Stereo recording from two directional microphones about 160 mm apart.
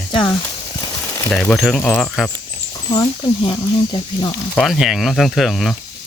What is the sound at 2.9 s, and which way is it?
Speech, 25° left (ahead or behind).